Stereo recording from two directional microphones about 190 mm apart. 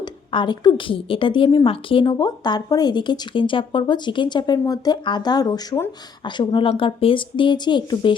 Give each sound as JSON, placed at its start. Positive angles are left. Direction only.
{"t": 0.0, "sound": "speech", "side_deg": 25}